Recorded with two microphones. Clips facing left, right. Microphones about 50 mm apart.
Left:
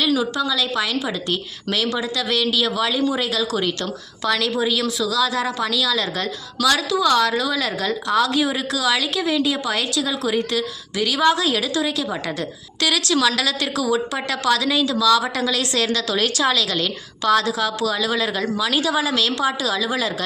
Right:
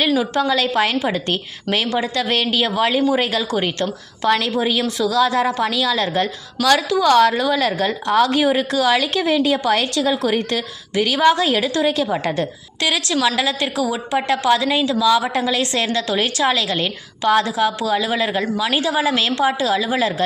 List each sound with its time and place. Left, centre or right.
0.2 s a woman's voice: right
12.8 s a woman's voice: right